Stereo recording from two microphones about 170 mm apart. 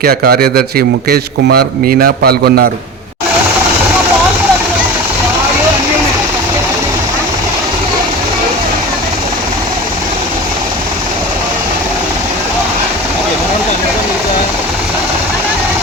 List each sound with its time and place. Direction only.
0.0 s a man's voice: 60° right (ahead or behind)